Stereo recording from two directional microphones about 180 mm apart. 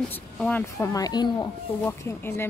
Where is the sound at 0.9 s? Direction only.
20° left (ahead or behind).